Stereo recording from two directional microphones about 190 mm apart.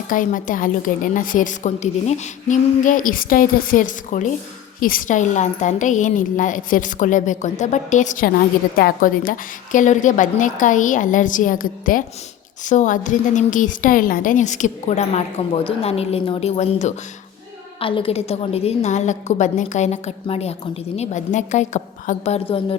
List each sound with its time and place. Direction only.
0.1 s a woman's voice: 45° left (ahead or behind)